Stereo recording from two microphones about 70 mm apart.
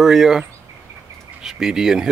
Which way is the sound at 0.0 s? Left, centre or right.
Centre.